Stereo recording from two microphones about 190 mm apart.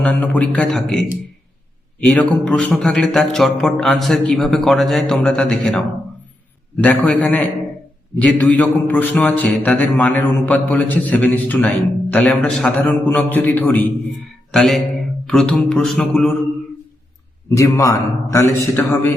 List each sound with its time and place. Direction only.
0.0 s speech: 5° left (ahead or behind)
6.8 s a man's voice: 10° left (ahead or behind)
17.5 s a man's voice: 15° left (ahead or behind)